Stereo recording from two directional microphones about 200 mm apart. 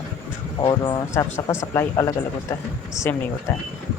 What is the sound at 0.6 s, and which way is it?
Speech, 20° left (ahead or behind).